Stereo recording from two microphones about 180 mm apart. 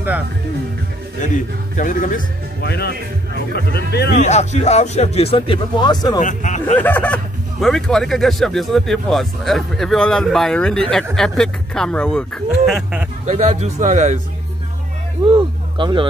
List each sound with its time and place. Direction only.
1.8 s speech: 45° left (ahead or behind)
2.6 s speech: 65° left (ahead or behind)
4.2 s speech: 40° left (ahead or behind); by 6.2 s 20° left (ahead or behind)
6.2 s speech: 40° left (ahead or behind)
6.6 s speech: 10° left (ahead or behind)
13.3 s a man's voice: 35° right (ahead or behind)
15.2 s speech: 25° right (ahead or behind)